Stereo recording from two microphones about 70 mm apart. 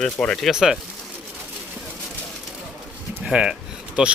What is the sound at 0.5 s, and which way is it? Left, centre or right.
Speech, centre.